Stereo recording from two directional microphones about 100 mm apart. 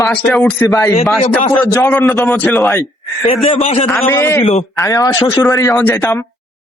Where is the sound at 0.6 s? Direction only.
40° left (ahead or behind).